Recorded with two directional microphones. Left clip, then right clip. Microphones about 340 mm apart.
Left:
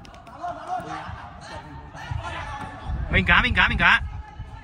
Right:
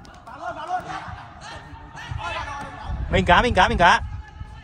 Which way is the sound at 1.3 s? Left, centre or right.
Centre.